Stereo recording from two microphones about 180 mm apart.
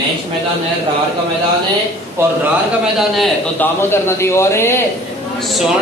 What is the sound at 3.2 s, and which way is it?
A man's voice, 10° left (ahead or behind).